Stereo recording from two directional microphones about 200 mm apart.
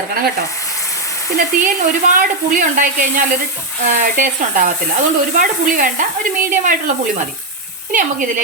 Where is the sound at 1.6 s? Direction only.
40° right (ahead or behind).